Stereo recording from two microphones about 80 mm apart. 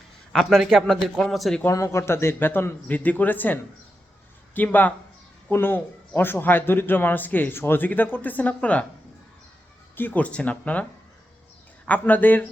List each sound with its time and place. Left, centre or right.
0.6 s speech: centre
1.7 s a man's voice: left; by 8.9 s centre
9.9 s a man's voice: left
11.9 s a man's voice: left